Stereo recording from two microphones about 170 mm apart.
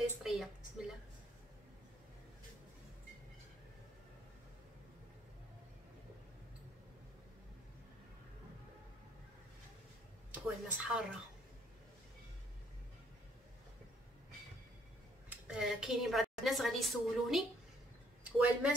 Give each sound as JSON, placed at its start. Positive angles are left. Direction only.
{"t": 0.2, "sound": "a sound", "side_deg": 0}
{"t": 10.3, "sound": "speech", "side_deg": -5}
{"t": 15.2, "sound": "a woman's voice", "side_deg": -5}